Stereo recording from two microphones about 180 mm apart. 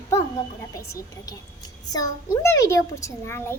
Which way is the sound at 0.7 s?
20° left (ahead or behind).